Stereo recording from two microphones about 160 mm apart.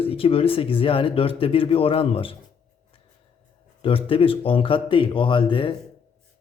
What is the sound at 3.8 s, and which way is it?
A man's voice, 35° left (ahead or behind).